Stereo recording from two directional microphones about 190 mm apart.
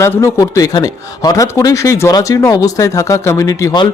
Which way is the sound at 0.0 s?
15° left (ahead or behind).